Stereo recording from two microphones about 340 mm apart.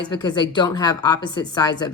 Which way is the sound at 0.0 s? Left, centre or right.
Centre.